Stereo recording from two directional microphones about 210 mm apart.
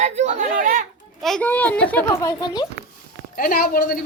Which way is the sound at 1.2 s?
5° left (ahead or behind).